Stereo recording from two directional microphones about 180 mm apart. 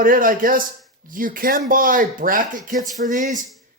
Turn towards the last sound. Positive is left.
turn(degrees=-45)  # may be behind; listen again after turning